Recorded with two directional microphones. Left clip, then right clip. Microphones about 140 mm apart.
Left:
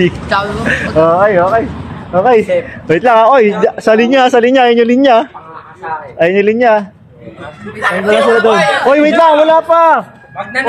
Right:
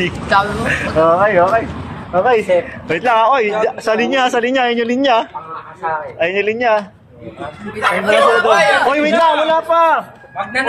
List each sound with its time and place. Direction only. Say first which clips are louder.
0.0 s speech: left 1 dB; 20° left (ahead or behind)
2.9 s speech: left 6 dB; 30° left (ahead or behind)
7.8 s speech: left 2 dB; centre (ahead or behind)
8.3 s speech: left 3 dB; 30° left (ahead or behind)
8.5 s speech: left 1 dB; centre (ahead or behind)
8.8 s speech: left 5 dB; 35° left (ahead or behind)